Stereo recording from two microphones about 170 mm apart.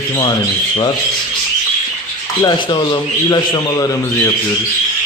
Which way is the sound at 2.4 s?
25° left (ahead or behind).